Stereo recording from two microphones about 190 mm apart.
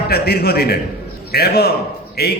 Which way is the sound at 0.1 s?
55° left (ahead or behind).